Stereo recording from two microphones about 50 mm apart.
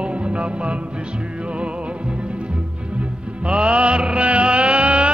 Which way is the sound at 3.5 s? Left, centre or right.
Centre.